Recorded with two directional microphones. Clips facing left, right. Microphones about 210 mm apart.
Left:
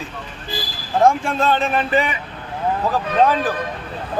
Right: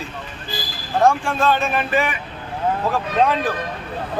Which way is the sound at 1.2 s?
20° left (ahead or behind).